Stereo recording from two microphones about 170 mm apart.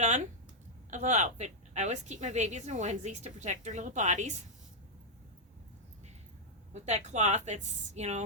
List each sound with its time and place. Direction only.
0.0 s a woman's voice: 45° right (ahead or behind)
6.7 s a woman's voice: 40° right (ahead or behind)